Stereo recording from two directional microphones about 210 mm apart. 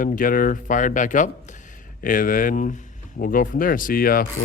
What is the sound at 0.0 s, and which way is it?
Speech, 40° left (ahead or behind).